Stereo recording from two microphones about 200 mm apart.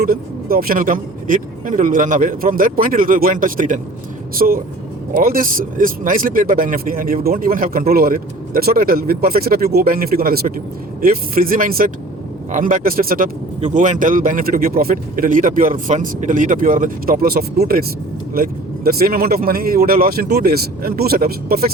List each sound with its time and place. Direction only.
0.0 s a man's voice: 45° right (ahead or behind)
18.9 s a man's voice: 50° right (ahead or behind)